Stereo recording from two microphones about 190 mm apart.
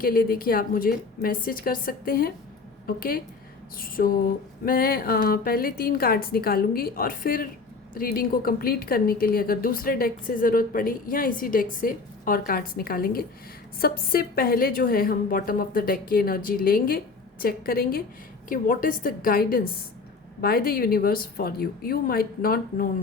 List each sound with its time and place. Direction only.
0.0 s a woman's voice: 50° left (ahead or behind)